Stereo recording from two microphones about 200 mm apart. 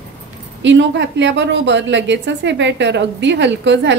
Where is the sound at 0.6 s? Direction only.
65° right (ahead or behind).